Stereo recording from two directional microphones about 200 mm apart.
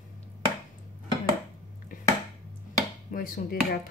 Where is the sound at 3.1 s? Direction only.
45° left (ahead or behind).